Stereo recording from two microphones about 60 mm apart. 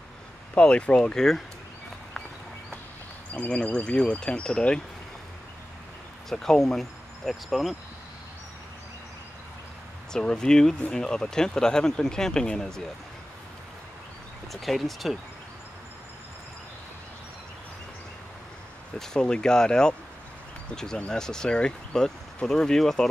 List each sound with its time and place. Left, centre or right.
0.6 s speech: centre
3.3 s speech: left
6.2 s speech: centre
10.1 s speech: centre
14.5 s speech: centre
18.9 s speech: centre